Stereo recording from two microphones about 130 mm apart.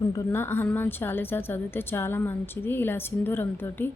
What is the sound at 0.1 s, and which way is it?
A woman's voice, 20° left (ahead or behind).